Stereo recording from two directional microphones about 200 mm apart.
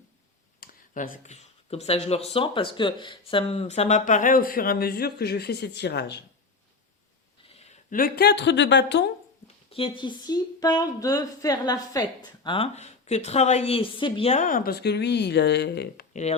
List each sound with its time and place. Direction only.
0.6 s speech: 45° left (ahead or behind)
7.5 s speech: 30° left (ahead or behind); by 9.1 s 60° left (ahead or behind)
9.6 s speech: 25° left (ahead or behind); by 16.0 s 55° left (ahead or behind)